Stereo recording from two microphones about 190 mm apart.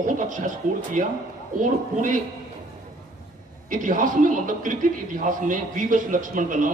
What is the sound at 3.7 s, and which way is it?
A man's voice, 45° right (ahead or behind).